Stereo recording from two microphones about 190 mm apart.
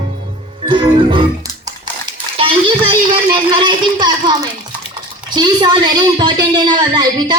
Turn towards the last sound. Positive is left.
turn(degrees=-20)  # may be behind; listen again after turning